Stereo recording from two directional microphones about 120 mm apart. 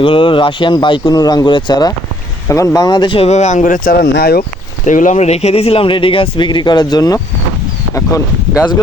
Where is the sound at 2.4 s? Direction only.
25° left (ahead or behind).